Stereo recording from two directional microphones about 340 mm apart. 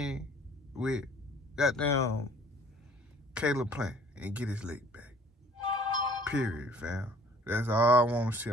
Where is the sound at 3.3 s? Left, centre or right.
Centre.